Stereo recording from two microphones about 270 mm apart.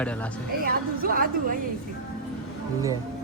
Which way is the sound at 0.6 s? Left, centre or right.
Right.